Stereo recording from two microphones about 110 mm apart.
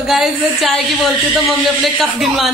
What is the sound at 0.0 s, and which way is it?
A woman's voice, 5° right (ahead or behind).